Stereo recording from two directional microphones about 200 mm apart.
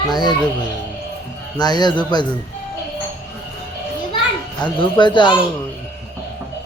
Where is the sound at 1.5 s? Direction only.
20° left (ahead or behind).